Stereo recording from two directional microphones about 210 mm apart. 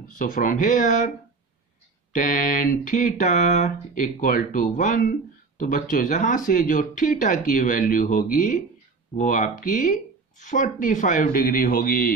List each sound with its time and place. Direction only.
0.1 s speech: 40° left (ahead or behind)
2.1 s speech: 40° left (ahead or behind)